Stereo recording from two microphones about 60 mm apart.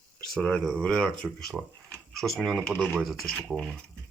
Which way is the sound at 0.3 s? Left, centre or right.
Left.